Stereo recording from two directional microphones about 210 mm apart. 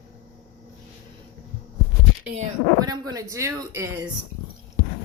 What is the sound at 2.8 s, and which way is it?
Speech, 15° right (ahead or behind).